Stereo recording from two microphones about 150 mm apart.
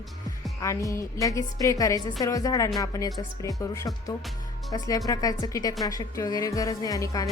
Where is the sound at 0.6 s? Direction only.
20° left (ahead or behind).